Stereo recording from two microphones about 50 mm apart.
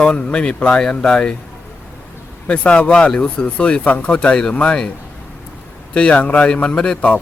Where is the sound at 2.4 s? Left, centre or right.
Left.